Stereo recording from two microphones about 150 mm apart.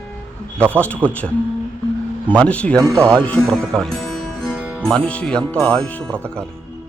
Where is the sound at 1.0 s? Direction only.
10° left (ahead or behind).